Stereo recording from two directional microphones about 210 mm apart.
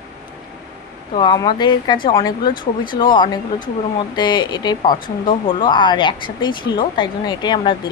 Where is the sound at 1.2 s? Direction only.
20° left (ahead or behind).